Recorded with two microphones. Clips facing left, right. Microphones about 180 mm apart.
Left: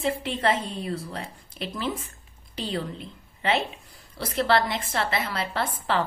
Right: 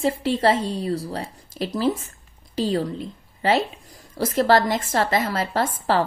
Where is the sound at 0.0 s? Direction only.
35° right (ahead or behind).